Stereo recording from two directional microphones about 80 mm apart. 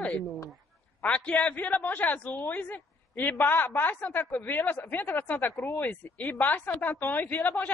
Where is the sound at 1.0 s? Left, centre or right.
Centre.